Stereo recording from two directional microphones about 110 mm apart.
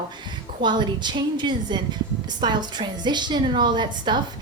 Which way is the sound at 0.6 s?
45° right (ahead or behind).